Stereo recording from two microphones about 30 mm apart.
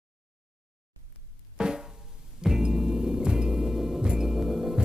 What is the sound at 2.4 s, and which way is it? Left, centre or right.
Music, centre.